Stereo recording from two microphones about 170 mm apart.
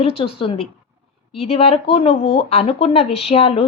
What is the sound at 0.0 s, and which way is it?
Speech, 35° left (ahead or behind).